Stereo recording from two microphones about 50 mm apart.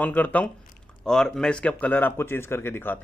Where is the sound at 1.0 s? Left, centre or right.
Centre; by 2.1 s left.